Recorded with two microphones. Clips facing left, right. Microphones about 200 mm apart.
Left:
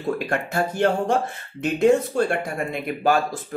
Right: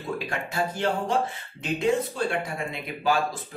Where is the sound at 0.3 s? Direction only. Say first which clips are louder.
Left 5 dB; 55° left (ahead or behind).